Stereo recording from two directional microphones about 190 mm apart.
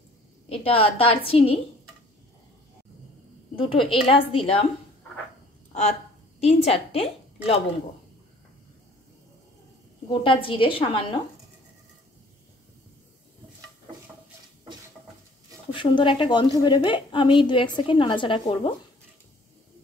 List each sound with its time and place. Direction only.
0.5 s a woman's voice: 30° left (ahead or behind)
3.5 s a woman's voice: 30° left (ahead or behind)
5.7 s a woman's voice: 35° left (ahead or behind)
10.0 s a woman's voice: 25° left (ahead or behind)
15.7 s a woman's voice: 25° left (ahead or behind)